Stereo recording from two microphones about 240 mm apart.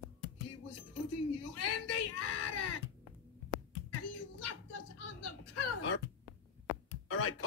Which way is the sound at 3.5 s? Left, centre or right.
Left.